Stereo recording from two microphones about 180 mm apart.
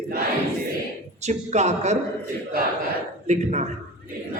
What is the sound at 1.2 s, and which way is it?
Speech, 40° right (ahead or behind).